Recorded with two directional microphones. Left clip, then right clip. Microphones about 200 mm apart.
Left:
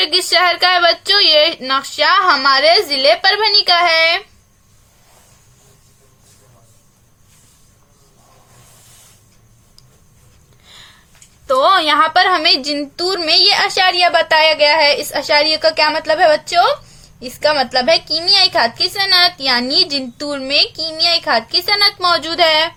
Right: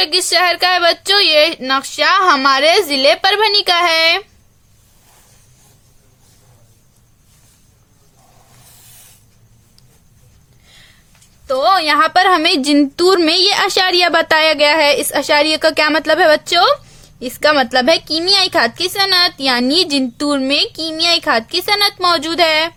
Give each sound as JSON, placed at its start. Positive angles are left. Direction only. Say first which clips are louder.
{"t": 0.0, "sound": "a woman's voice", "louder": "even", "side_deg": -25}
{"t": 10.7, "sound": "a sound", "louder": "left 4 dB", "side_deg": -5}
{"t": 11.4, "sound": "a woman's voice", "louder": "left 1 dB", "side_deg": -15}